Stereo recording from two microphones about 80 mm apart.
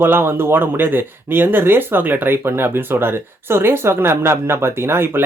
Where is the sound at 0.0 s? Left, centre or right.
Right.